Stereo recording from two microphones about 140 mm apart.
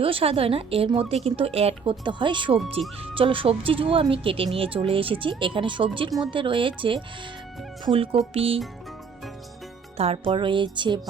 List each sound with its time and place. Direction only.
0.0 s a woman's voice: 40° right (ahead or behind)
10.0 s a woman's voice: 40° right (ahead or behind)